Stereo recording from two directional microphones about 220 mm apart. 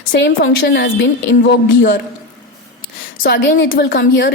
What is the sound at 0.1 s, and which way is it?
A woman's voice, 55° left (ahead or behind).